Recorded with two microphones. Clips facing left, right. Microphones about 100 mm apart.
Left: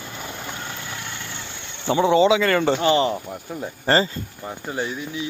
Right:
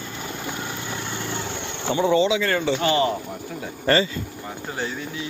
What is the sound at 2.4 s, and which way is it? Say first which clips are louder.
Speech: left 3 dB; 55° left (ahead or behind).